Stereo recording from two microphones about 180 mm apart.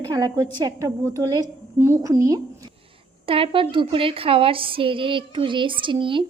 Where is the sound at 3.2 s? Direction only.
30° right (ahead or behind).